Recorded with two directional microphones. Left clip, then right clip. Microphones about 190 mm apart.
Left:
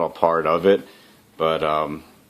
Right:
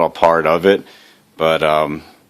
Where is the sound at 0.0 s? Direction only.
50° right (ahead or behind).